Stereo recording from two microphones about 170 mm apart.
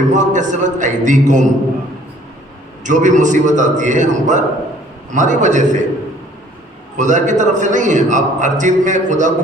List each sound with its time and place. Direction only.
0.1 s a man's voice: 45° right (ahead or behind)
2.8 s a man's voice: 45° right (ahead or behind)
6.9 s a man's voice: 45° right (ahead or behind)